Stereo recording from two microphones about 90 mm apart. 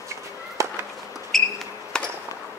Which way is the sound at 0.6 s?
35° right (ahead or behind).